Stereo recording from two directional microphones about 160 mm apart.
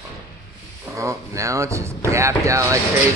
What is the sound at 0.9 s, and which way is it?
A man's voice, 20° right (ahead or behind).